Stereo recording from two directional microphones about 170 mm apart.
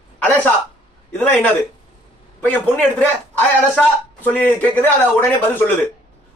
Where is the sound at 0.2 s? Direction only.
10° left (ahead or behind).